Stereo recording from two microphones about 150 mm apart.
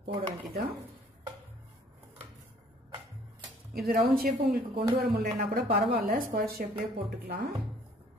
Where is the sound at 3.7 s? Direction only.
80° right.